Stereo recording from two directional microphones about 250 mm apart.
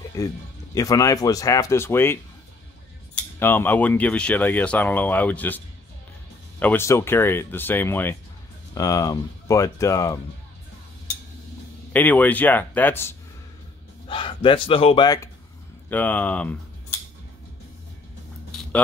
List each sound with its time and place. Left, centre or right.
0.2 s speech: centre
3.3 s speech: centre
6.6 s speech: centre
11.9 s speech: centre
14.0 s speech: left
18.5 s a sound: centre